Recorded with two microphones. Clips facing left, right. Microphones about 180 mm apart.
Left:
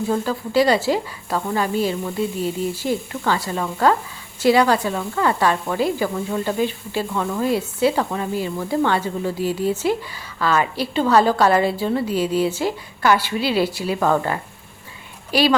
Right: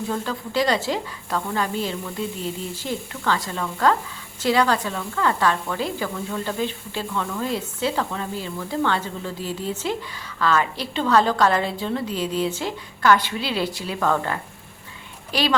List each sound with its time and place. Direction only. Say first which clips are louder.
0.1 s a woman's voice: left 7 dB; 10° left (ahead or behind)